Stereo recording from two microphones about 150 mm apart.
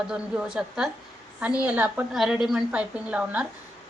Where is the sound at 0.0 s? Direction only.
5° right (ahead or behind).